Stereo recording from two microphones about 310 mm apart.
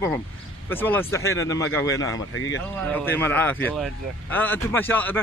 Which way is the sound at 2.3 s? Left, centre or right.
Left.